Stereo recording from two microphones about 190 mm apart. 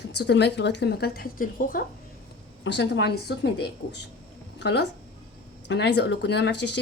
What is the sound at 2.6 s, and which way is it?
Speech, 70° left (ahead or behind).